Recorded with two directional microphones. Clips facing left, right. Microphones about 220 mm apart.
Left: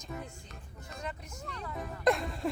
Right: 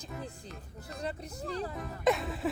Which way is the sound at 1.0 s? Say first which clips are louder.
Right 4 dB; 35° right (ahead or behind).